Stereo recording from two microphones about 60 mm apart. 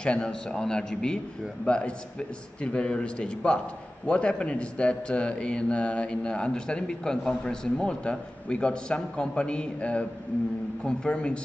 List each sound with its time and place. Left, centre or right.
0.0 s a man's voice: centre